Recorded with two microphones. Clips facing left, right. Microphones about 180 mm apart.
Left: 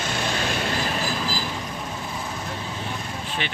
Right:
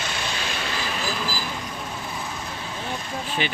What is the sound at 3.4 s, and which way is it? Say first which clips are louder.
Speech: right 5 dB; 5° right (ahead or behind).